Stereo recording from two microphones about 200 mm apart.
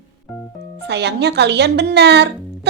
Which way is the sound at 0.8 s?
60° right (ahead or behind).